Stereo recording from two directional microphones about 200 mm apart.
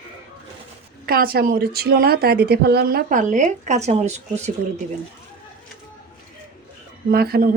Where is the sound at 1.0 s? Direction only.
50° right (ahead or behind).